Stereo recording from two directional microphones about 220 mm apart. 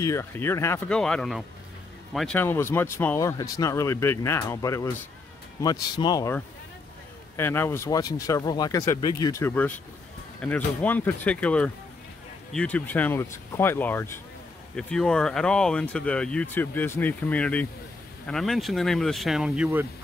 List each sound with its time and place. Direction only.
0.0 s speech: 10° left (ahead or behind); by 19.9 s 5° right (ahead or behind)